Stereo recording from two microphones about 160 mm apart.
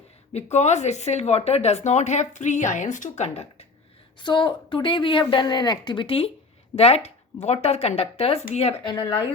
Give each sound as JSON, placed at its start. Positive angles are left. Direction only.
{"t": 0.5, "sound": "speech", "side_deg": 45}
{"t": 4.2, "sound": "a woman's voice", "side_deg": 30}